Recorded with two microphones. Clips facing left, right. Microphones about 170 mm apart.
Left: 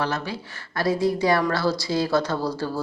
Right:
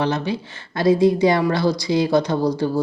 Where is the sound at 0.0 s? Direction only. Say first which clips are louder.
Right 5 dB; 20° right (ahead or behind).